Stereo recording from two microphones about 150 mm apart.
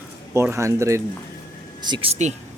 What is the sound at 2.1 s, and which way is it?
Speech, 50° right (ahead or behind).